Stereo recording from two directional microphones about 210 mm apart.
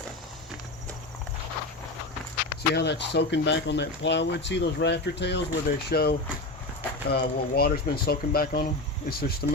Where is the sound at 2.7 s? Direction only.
55° left (ahead or behind).